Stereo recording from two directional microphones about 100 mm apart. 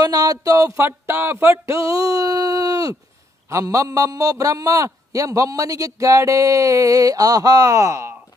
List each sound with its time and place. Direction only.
0.0 s a man's voice: 40° right (ahead or behind)
0.8 s a sound: 25° right (ahead or behind)
1.9 s a man's voice: 35° right (ahead or behind)